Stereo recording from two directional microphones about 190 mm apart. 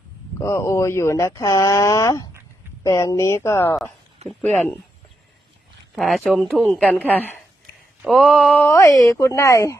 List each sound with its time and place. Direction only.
0.3 s speech: 15° left (ahead or behind)
4.3 s speech: centre (ahead or behind)
6.0 s speech: centre (ahead or behind)
8.6 s speech: 15° left (ahead or behind)